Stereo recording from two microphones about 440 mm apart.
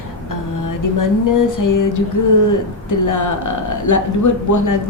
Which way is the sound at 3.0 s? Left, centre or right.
Left.